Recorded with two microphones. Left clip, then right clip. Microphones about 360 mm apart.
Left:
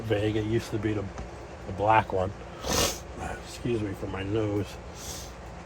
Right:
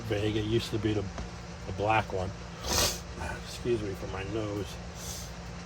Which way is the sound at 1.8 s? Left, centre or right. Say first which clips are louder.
Left 5 dB; centre.